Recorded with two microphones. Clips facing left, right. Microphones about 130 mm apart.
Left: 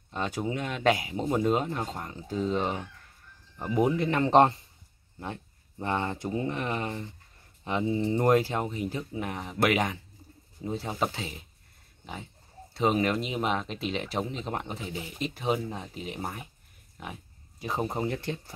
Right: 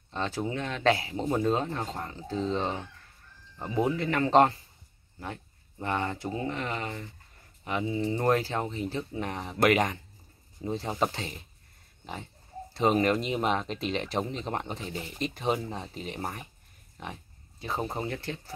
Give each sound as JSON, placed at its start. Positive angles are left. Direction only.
{"t": 0.1, "sound": "speech", "side_deg": 15}
{"t": 12.7, "sound": "speech", "side_deg": 0}
{"t": 17.6, "sound": "speech", "side_deg": 15}